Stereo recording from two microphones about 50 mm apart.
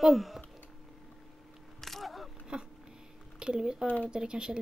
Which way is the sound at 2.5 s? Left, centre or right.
Centre.